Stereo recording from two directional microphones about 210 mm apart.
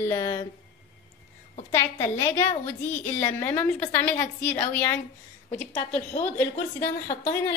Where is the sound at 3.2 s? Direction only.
10° left (ahead or behind).